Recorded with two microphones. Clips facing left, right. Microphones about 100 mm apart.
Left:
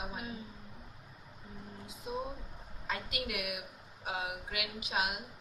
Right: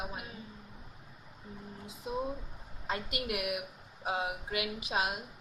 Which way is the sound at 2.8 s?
25° right (ahead or behind).